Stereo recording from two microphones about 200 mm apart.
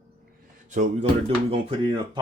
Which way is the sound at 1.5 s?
25° right (ahead or behind).